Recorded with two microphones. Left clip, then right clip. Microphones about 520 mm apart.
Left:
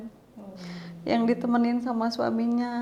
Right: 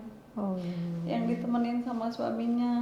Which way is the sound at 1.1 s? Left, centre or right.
Left.